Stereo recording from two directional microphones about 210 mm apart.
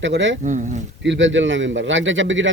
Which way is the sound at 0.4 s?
35° right (ahead or behind).